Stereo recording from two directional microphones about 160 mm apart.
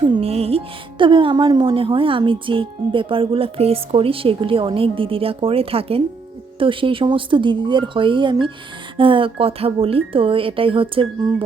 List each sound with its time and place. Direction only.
0.0 s speech: 35° right (ahead or behind)